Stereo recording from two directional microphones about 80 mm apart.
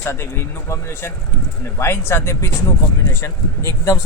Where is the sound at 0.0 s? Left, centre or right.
Left.